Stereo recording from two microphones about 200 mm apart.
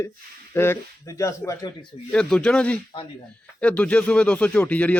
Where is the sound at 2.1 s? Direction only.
5° left (ahead or behind).